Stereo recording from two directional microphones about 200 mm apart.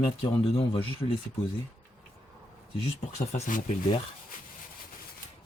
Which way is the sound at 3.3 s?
35° left (ahead or behind).